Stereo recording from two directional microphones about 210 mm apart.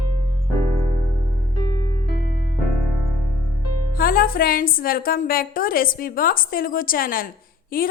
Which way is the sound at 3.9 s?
45° left (ahead or behind).